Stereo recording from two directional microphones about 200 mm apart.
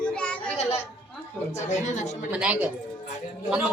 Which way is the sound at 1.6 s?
35° left (ahead or behind).